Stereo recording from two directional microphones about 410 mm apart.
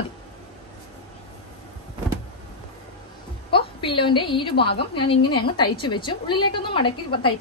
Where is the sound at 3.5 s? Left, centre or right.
Centre.